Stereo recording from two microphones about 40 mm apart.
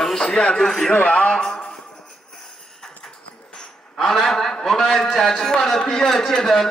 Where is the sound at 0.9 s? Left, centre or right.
Left.